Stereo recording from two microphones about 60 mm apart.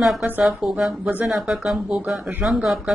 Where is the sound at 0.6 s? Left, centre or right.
Centre.